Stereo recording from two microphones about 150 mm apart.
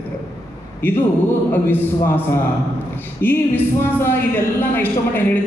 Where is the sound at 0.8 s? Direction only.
15° left (ahead or behind).